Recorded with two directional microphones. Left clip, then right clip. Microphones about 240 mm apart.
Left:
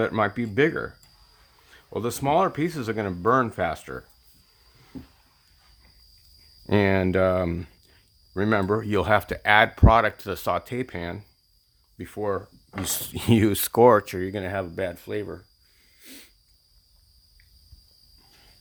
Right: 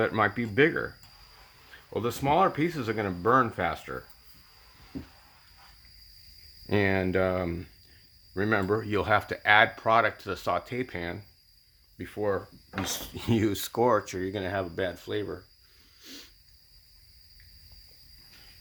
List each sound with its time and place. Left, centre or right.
0.0 s speech: left
6.7 s speech: left
16.0 s a sound: left